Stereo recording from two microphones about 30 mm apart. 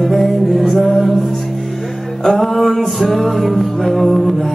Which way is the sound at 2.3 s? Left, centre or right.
Centre.